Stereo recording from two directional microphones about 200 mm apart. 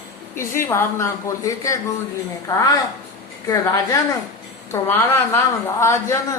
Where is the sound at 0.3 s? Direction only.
15° left (ahead or behind).